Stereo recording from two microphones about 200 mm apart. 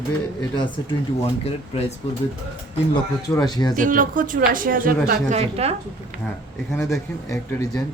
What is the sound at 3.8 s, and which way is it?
Speech, 40° right (ahead or behind).